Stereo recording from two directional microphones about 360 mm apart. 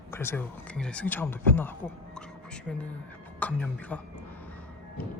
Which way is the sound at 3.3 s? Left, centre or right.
Centre.